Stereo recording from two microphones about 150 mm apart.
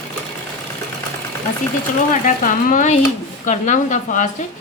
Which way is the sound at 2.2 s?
60° left (ahead or behind).